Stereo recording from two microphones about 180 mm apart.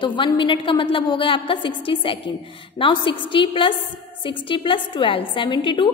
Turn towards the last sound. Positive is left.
turn(degrees=25)  # may be behind; listen again after turning